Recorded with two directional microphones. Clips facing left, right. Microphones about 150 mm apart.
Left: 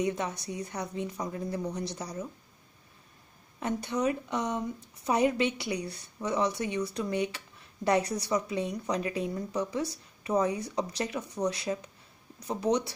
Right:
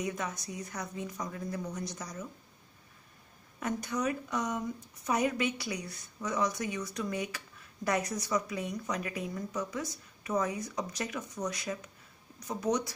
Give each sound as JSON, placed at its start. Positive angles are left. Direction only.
{"t": 0.0, "sound": "speech", "side_deg": 30}
{"t": 3.5, "sound": "speech", "side_deg": 30}